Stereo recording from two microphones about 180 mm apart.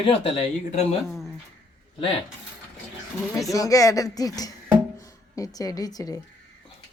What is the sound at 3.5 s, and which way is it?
Speech, 20° left (ahead or behind).